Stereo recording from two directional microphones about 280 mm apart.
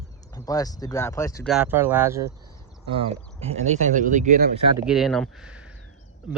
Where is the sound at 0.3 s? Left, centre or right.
Centre.